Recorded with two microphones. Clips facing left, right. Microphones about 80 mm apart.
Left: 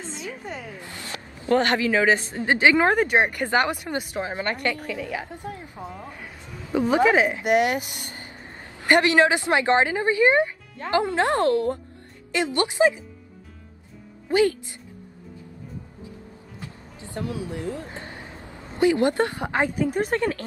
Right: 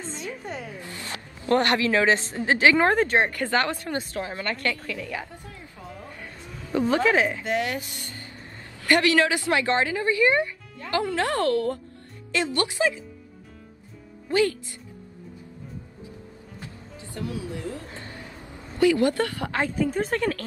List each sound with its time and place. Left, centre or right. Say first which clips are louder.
0.0 s a sound: even; centre
1.4 s speech: left 1 dB; left
14.3 s speech: left 2 dB; left
17.2 s speech: left 2 dB; left